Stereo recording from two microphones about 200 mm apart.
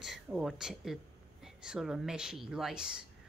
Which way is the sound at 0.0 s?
5° right (ahead or behind).